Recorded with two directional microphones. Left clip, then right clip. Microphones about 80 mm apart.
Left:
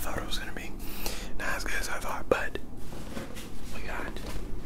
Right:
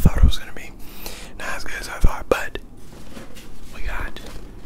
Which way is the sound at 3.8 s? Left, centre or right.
Right.